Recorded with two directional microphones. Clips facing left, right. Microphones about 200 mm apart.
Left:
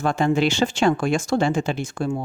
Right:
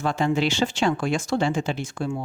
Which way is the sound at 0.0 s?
50° left (ahead or behind).